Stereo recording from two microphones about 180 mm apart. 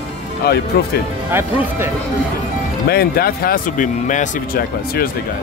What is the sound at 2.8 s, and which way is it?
A man's voice, 60° left (ahead or behind).